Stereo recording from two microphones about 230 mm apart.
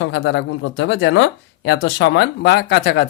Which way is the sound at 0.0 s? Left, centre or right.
Left.